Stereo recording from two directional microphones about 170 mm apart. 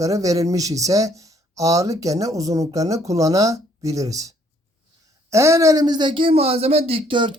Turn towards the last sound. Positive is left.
turn(degrees=-30)  # may be behind; listen again after turning